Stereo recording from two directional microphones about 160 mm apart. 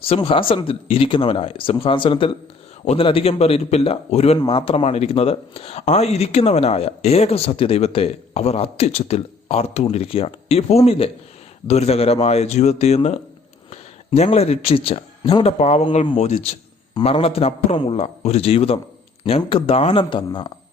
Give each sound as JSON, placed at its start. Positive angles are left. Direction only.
{"t": 0.0, "sound": "speech", "side_deg": 35}